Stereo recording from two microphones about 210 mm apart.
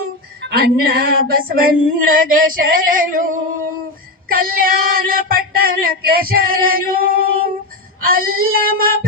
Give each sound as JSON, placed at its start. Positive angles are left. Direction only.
{"t": 0.4, "sound": "female singing", "side_deg": -45}
{"t": 8.0, "sound": "child singing", "side_deg": -45}
{"t": 8.5, "sound": "female singing", "side_deg": -45}